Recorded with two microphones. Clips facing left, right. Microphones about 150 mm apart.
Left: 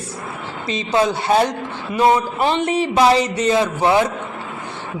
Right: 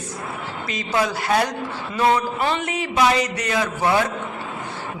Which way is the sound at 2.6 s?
30° left (ahead or behind).